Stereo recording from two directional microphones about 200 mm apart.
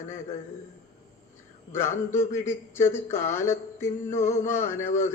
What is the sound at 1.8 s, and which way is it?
A man's voice, 15° left (ahead or behind).